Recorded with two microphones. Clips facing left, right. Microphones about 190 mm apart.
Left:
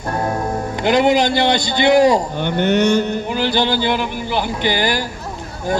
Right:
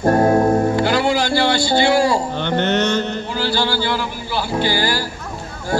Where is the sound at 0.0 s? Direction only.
45° right (ahead or behind).